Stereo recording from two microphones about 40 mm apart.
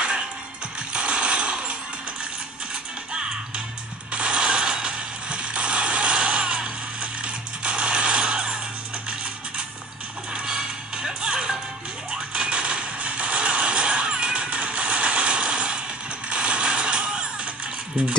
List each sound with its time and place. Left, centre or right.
0.7 s a sound: right
2.7 s music: right
4.1 s mechanisms: right
10.3 s music: right
16.3 s mechanisms: right